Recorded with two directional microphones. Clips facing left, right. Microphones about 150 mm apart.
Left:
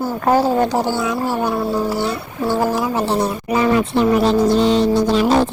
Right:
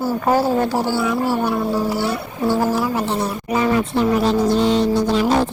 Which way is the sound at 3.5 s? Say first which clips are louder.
Left 2 dB; 80° left.